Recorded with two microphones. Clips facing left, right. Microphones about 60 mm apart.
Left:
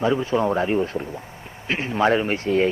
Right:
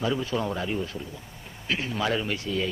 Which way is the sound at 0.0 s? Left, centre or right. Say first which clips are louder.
Left 7 dB; left.